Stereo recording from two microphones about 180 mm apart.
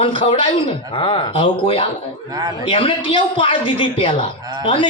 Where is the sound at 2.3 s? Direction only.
20° right (ahead or behind).